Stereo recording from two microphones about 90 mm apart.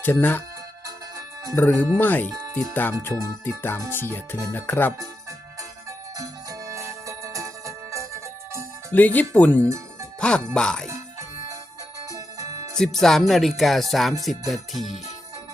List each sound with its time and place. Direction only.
0.0 s music: 20° left (ahead or behind)
1.5 s music: 20° left (ahead or behind)
6.1 s music: 35° right (ahead or behind)
8.9 s music: 20° left (ahead or behind)
9.3 s speech: 20° left (ahead or behind)
9.6 s music: 35° right (ahead or behind)
10.2 s speech: 10° left (ahead or behind)
12.1 s music: 40° right (ahead or behind)
12.7 s speech: 5° left (ahead or behind)